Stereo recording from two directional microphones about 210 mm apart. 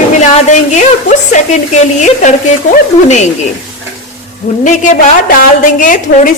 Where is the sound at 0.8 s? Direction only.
35° left (ahead or behind).